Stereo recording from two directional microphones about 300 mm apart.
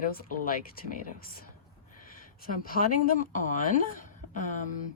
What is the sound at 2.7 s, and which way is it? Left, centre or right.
A woman's voice, left.